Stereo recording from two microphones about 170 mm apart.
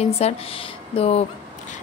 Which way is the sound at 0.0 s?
35° left (ahead or behind).